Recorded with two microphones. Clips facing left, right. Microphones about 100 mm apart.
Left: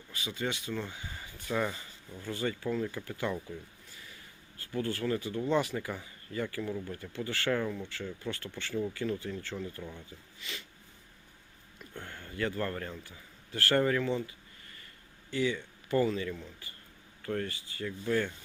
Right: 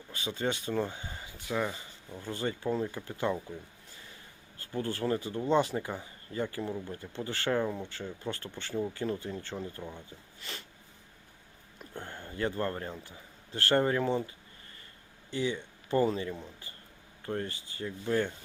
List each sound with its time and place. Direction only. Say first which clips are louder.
0.1 s speech: right 3 dB; 30° right (ahead or behind); by 1.7 s 10° right (ahead or behind)
1.7 s speech: right 2 dB; 25° right (ahead or behind)
4.5 s speech: even; 30° right (ahead or behind)
10.4 s speech: even; 40° right (ahead or behind)
11.8 s a man's voice: right 3 dB; 30° right (ahead or behind)
15.3 s speech: left 1 dB; 30° right (ahead or behind)